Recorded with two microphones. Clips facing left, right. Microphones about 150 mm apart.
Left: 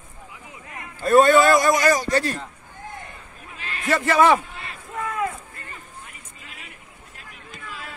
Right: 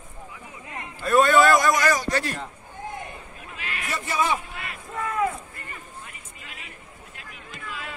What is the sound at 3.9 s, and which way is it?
Speech, 70° left (ahead or behind).